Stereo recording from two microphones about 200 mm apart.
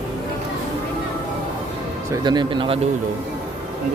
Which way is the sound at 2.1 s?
20° right (ahead or behind).